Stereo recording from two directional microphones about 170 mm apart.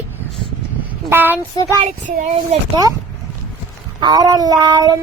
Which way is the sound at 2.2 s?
40° right (ahead or behind).